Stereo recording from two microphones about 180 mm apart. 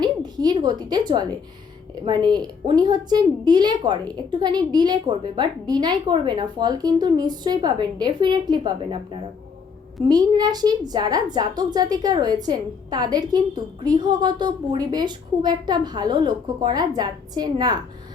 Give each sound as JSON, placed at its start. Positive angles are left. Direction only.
{"t": 0.0, "sound": "a sound", "side_deg": -20}
{"t": 2.0, "sound": "a woman's voice", "side_deg": -25}
{"t": 10.1, "sound": "a woman's voice", "side_deg": -20}